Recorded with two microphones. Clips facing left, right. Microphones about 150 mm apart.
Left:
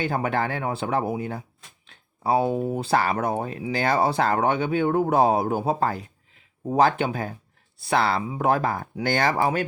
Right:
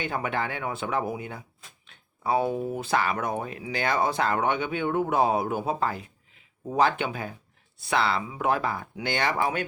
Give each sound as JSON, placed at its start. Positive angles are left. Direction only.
{"t": 0.0, "sound": "speech", "side_deg": 35}